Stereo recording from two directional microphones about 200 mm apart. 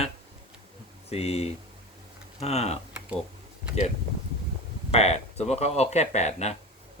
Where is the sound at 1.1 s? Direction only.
30° left (ahead or behind).